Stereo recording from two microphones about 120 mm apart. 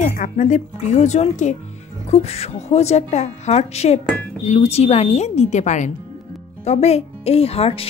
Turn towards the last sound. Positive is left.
turn(degrees=55)  # may be behind; listen again after turning